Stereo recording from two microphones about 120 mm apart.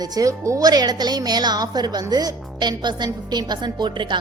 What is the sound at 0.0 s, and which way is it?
A woman's voice, 30° right (ahead or behind).